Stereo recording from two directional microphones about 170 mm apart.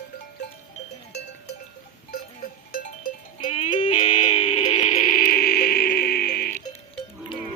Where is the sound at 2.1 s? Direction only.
60° left (ahead or behind).